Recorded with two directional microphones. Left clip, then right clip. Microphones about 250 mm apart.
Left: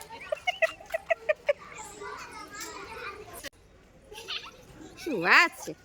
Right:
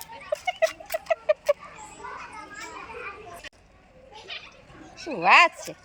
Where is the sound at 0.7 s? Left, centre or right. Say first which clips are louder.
Right 3 dB; right.